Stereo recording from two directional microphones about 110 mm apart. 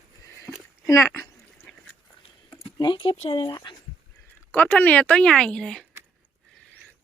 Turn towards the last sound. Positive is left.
turn(degrees=5)  # may be behind; listen again after turning